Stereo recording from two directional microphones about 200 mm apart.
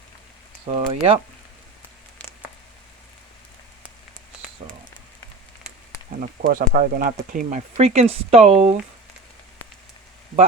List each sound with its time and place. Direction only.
0.7 s speech: 30° right (ahead or behind)
4.6 s a sound: 30° right (ahead or behind)
6.4 s speech: 45° right (ahead or behind)